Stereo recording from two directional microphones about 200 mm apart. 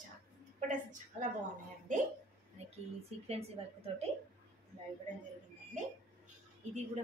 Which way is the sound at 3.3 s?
30° right (ahead or behind).